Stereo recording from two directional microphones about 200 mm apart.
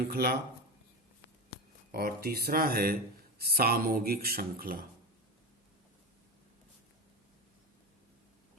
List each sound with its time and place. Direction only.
0.1 s speech: 50° right (ahead or behind)
1.9 s speech: 50° right (ahead or behind)